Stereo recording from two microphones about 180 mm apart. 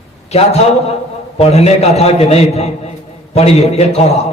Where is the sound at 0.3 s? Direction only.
35° left (ahead or behind).